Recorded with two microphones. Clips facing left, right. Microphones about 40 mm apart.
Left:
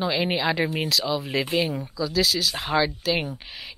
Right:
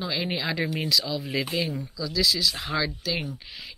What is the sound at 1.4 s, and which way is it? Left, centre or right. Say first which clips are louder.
Speech: left 4 dB; left.